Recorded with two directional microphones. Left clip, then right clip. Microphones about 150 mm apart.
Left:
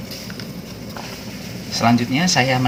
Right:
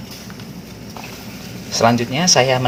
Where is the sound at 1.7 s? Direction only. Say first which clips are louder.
Right 3 dB; 50° right (ahead or behind).